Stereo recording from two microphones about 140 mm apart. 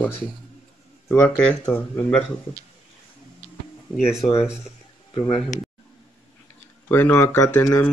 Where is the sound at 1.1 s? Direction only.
10° left (ahead or behind).